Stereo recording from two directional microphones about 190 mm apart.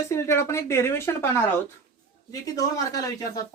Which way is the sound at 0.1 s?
15° left (ahead or behind).